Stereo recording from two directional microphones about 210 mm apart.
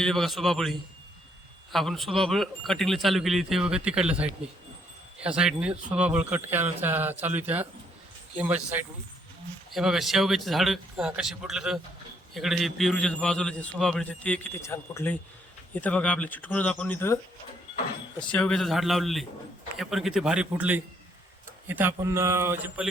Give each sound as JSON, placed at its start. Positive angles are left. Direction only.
{"t": 0.0, "sound": "a man's voice", "side_deg": 0}
{"t": 18.2, "sound": "a man's voice", "side_deg": 5}